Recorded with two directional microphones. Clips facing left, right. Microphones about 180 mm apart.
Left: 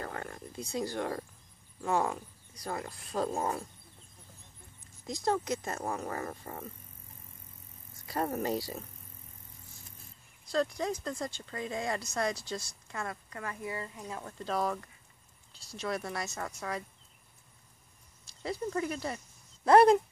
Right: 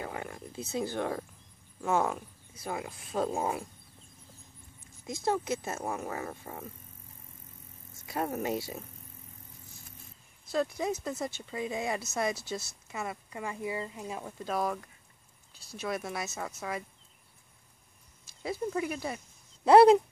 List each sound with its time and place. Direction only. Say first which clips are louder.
0.0 s speech: right 1 dB; 10° right (ahead or behind)
2.5 s speech: right 1 dB; 5° right (ahead or behind)
3.3 s speech: right 1 dB; 10° right (ahead or behind)
5.0 s speech: even; 5° right (ahead or behind)
7.9 s speech: even; centre (ahead or behind)
10.4 s a woman's voice: even; 5° right (ahead or behind); by 14.2 s 20° right (ahead or behind)
14.2 s speech: even; 5° right (ahead or behind)
18.4 s speech: right 1 dB; 5° right (ahead or behind)